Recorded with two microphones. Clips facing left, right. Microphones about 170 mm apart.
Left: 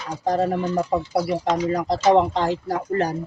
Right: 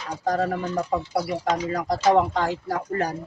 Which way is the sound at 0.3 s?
25° left (ahead or behind).